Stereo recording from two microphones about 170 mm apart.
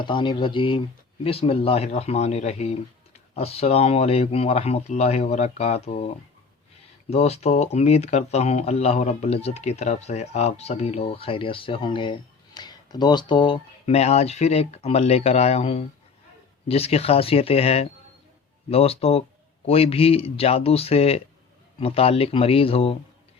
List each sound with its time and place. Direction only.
0.0 s speech: 30° left (ahead or behind)
7.1 s speech: 40° left (ahead or behind)